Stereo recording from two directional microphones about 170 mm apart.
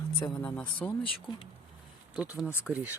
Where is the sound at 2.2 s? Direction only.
5° right (ahead or behind).